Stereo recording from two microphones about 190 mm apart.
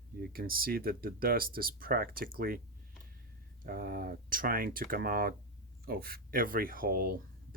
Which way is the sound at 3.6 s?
50° right (ahead or behind).